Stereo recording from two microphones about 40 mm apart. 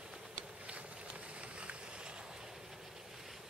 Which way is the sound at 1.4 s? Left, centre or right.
Right.